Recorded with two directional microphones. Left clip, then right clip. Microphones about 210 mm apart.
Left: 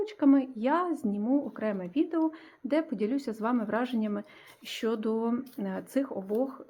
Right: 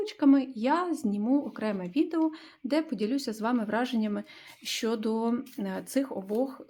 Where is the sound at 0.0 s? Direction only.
10° right (ahead or behind).